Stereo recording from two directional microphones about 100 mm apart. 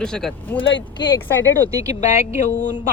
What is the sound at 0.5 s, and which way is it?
Speech, 15° left (ahead or behind).